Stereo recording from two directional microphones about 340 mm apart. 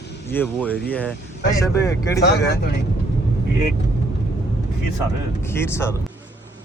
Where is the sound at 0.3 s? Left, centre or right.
Centre.